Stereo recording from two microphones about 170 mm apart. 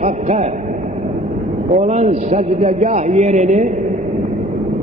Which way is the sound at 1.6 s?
45° right (ahead or behind).